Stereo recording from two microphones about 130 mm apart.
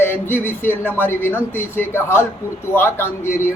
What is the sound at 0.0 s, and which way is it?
Speech, 15° left (ahead or behind).